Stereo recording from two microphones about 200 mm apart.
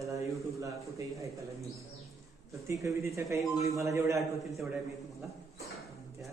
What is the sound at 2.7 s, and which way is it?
Speech, 15° right (ahead or behind).